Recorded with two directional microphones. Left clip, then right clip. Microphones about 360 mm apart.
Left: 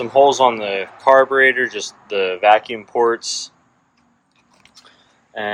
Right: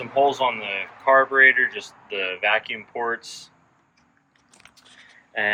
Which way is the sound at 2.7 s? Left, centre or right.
Left.